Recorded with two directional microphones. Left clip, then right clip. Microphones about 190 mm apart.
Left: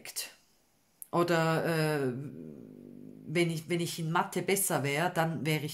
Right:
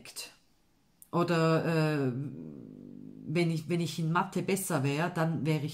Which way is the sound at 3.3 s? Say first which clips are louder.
Left 1 dB; 30° left (ahead or behind).